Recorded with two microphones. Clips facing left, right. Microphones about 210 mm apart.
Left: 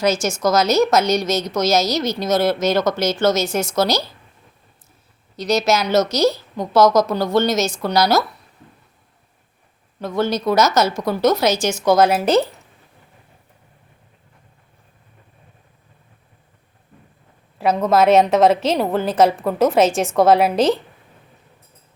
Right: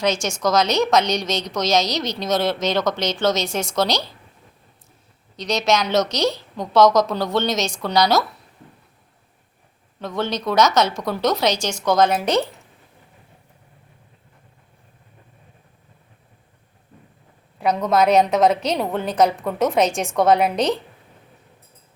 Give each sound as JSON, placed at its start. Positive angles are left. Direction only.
{"t": 0.0, "sound": "a woman's voice", "side_deg": 5}
{"t": 5.4, "sound": "a woman's voice", "side_deg": 5}
{"t": 10.0, "sound": "a woman's voice", "side_deg": 0}
{"t": 17.6, "sound": "a woman's voice", "side_deg": 0}